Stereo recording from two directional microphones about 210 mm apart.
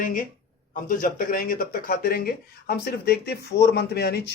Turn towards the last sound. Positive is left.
turn(degrees=50)  # may be behind; listen again after turning